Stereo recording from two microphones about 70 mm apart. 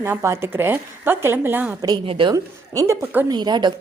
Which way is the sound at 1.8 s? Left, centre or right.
Right.